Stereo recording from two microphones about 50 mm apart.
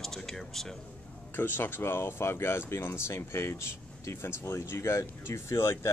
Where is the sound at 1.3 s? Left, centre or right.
Left.